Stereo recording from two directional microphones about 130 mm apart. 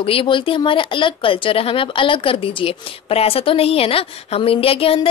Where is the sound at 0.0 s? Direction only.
45° left (ahead or behind).